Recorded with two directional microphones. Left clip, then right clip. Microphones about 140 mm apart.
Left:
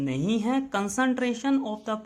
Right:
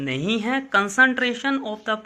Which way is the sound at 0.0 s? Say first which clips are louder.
Right 4 dB; 15° left (ahead or behind).